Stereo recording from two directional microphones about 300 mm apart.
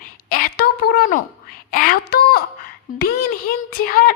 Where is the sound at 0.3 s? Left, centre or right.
Left.